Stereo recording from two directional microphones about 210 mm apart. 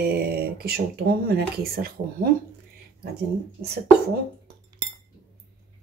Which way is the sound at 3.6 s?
50° right (ahead or behind).